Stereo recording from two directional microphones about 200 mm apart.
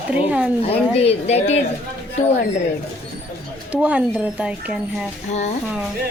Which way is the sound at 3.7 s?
5° right (ahead or behind).